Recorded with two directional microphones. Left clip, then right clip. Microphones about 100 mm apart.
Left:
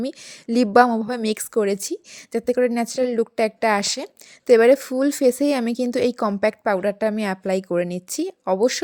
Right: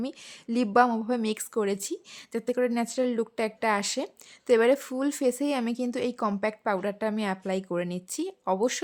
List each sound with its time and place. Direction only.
0.0 s a woman's voice: 45° left (ahead or behind)